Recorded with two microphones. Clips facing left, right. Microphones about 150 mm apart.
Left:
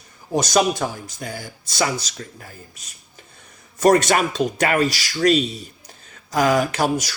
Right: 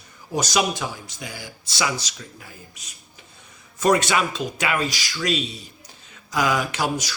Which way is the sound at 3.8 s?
45° left (ahead or behind).